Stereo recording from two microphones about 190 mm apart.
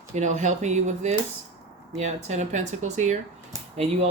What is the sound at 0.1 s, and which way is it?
Speech, 40° right (ahead or behind).